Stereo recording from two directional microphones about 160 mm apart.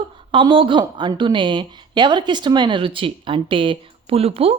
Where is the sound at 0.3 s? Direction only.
30° right (ahead or behind).